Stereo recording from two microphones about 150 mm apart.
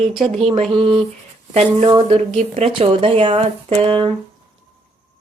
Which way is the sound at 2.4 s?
40° right (ahead or behind).